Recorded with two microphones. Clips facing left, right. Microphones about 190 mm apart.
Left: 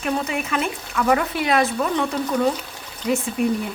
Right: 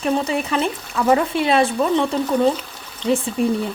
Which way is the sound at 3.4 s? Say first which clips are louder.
Right 1 dB; 30° right (ahead or behind).